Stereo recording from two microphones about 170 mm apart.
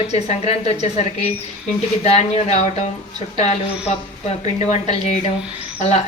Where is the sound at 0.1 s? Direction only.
40° left (ahead or behind).